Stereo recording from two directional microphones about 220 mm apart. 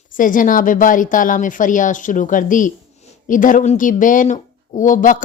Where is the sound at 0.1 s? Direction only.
35° left (ahead or behind).